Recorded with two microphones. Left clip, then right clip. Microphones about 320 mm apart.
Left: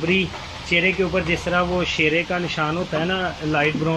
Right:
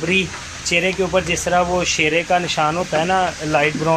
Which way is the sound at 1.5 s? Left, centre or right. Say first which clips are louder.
Right 5 dB; centre.